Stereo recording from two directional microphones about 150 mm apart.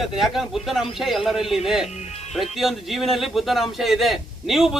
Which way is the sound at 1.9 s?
45° left (ahead or behind).